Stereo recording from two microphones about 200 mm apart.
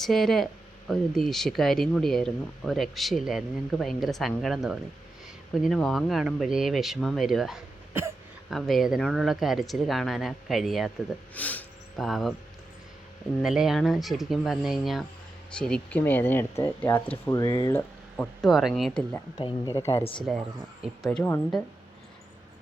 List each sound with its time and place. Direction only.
0.0 s speech: centre (ahead or behind)
13.4 s speech: centre (ahead or behind)
19.4 s speech: 20° left (ahead or behind)
20.3 s speech: 5° left (ahead or behind)